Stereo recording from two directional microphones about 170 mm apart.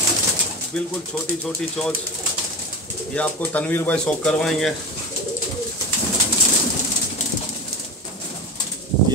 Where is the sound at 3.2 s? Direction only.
10° left (ahead or behind).